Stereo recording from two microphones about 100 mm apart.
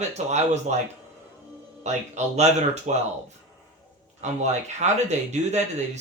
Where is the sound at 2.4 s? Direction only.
90° right.